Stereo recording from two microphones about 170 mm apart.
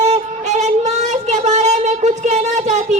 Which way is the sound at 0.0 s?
40° right (ahead or behind).